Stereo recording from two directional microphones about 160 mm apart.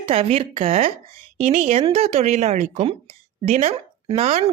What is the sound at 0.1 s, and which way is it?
A woman's voice, 40° right (ahead or behind).